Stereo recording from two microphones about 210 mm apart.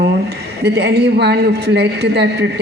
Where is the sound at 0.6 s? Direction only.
50° right (ahead or behind).